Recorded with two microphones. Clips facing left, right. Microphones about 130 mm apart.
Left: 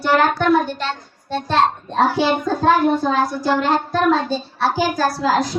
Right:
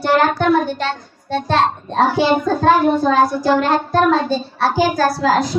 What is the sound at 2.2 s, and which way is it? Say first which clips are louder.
Child singing: right 3 dB; 30° right (ahead or behind).